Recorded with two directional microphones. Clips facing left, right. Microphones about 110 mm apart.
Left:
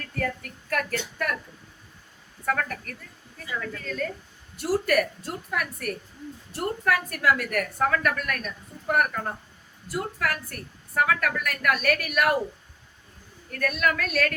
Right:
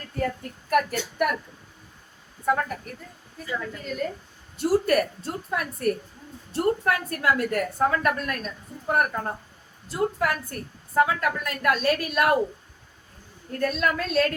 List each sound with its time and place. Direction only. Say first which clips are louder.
0.0 s a woman's voice: right 2 dB; 20° right (ahead or behind)
2.5 s a woman's voice: right 3 dB; 20° right (ahead or behind)
4.5 s a woman's voice: right 2 dB; 25° right (ahead or behind)
13.5 s a woman's voice: right 1 dB; 25° right (ahead or behind)